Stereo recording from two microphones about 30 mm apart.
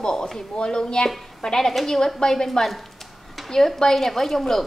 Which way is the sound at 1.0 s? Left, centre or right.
Centre.